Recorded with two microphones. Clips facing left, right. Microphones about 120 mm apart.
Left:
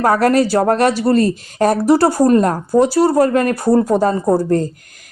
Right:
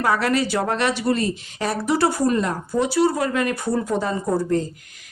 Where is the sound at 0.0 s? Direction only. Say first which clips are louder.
Left 7 dB; 45° left (ahead or behind).